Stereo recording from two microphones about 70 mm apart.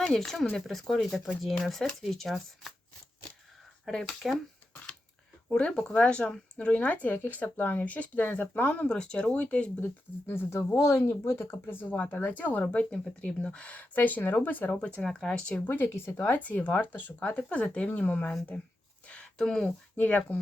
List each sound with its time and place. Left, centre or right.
0.0 s speech: centre
3.8 s speech: centre
5.5 s speech: centre
9.8 s speech: left
10.8 s speech: left; by 15.7 s centre
15.7 s speech: left
19.0 s a sound: centre
20.0 s speech: left